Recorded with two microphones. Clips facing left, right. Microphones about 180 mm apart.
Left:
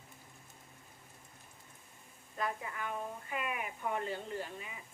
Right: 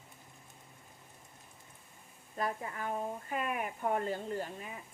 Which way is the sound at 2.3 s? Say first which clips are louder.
Right 2 dB; 35° right (ahead or behind).